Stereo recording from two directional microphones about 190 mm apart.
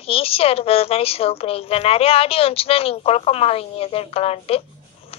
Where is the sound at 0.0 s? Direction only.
30° left (ahead or behind).